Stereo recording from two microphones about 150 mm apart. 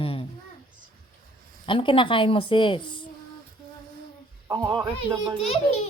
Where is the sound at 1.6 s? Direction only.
35° left (ahead or behind).